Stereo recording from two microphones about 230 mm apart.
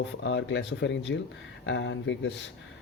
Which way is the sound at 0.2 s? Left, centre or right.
Left.